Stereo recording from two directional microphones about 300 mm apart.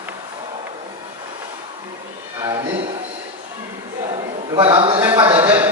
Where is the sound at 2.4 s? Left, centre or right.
Centre.